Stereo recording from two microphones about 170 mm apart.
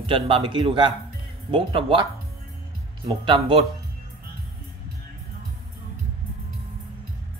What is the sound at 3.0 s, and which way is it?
Speech, 30° right (ahead or behind).